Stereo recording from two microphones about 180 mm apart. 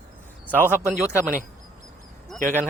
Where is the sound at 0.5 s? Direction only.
10° right (ahead or behind).